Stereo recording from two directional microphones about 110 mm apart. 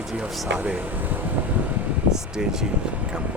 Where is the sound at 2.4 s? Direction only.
5° right (ahead or behind).